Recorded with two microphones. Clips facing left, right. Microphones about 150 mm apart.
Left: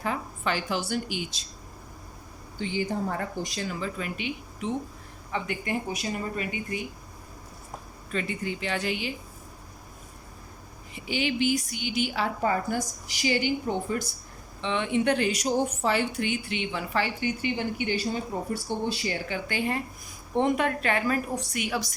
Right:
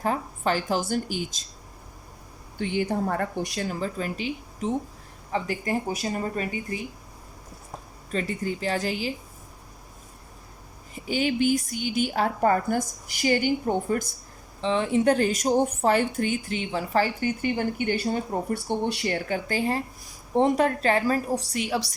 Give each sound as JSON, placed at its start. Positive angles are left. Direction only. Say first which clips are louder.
{"t": 0.0, "sound": "speech", "louder": "right 4 dB", "side_deg": -40}
{"t": 2.6, "sound": "speech", "louder": "right 3 dB", "side_deg": -60}
{"t": 3.7, "sound": "a woman's voice", "louder": "right 3 dB", "side_deg": -40}
{"t": 8.1, "sound": "a woman's voice", "louder": "right 3 dB", "side_deg": -40}
{"t": 10.9, "sound": "speech", "louder": "right 3 dB", "side_deg": -45}
{"t": 14.6, "sound": "speech", "louder": "right 4 dB", "side_deg": -35}
{"t": 19.3, "sound": "a woman's voice", "louder": "right 3 dB", "side_deg": -35}